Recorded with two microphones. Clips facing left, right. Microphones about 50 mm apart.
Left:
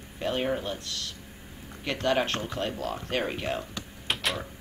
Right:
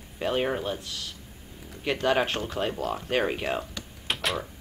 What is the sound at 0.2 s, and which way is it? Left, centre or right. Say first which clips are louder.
Speech: right 2 dB; centre.